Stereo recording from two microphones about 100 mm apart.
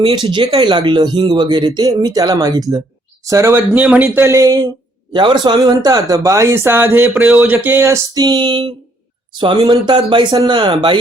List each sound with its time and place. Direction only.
0.0 s speech: 65° right (ahead or behind); by 3.6 s 30° right (ahead or behind)
3.8 s speech: 15° right (ahead or behind); by 4.6 s 35° right (ahead or behind)
5.1 s speech: 50° right (ahead or behind); by 8.2 s 30° right (ahead or behind)
8.2 s speech: 45° right (ahead or behind)